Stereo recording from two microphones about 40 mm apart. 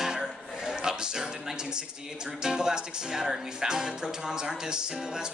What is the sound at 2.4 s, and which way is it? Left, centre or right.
Music, centre.